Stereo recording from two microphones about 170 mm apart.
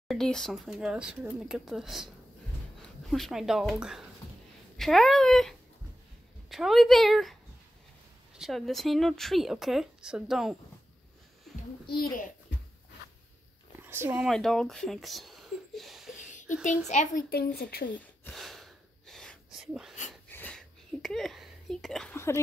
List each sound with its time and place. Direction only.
0.1 s speech: centre (ahead or behind)
3.1 s speech: centre (ahead or behind)
8.4 s speech: centre (ahead or behind)
11.5 s a sound: centre (ahead or behind)
11.9 s a child's voice: 60° left (ahead or behind)
13.8 s speech: 15° right (ahead or behind)
14.2 s speech: centre (ahead or behind)
16.2 s a sound: 45° left (ahead or behind)
16.6 s speech: 45° left (ahead or behind); by 17.9 s 65° left (ahead or behind)
17.9 s gasp: 5° left (ahead or behind)
20.2 s a sound: 10° left (ahead or behind)
22.1 s speech: 15° left (ahead or behind)